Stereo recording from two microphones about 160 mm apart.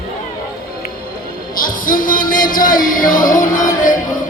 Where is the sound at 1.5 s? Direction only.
60° left (ahead or behind).